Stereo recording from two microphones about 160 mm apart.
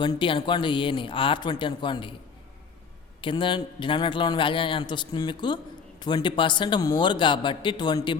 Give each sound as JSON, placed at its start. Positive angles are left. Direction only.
{"t": 0.0, "sound": "speech", "side_deg": 30}
{"t": 3.2, "sound": "a man's voice", "side_deg": 30}